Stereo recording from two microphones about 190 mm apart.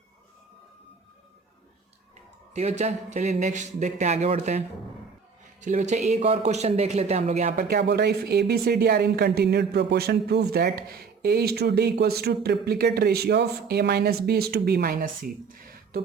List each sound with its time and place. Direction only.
2.5 s speech: 35° right (ahead or behind)
7.6 s speech: 60° right (ahead or behind)